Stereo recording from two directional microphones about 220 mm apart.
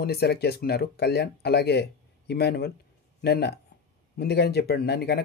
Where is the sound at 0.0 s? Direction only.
45° left (ahead or behind).